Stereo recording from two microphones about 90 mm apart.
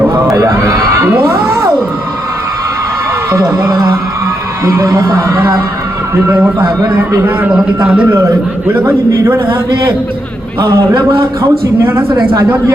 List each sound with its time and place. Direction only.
0.1 s a sound: 35° right (ahead or behind)
3.3 s a man's voice: 35° right (ahead or behind)
6.2 s a man's voice: 20° right (ahead or behind)
8.9 s a man's voice: 30° right (ahead or behind)
11.8 s a man's voice: 30° right (ahead or behind)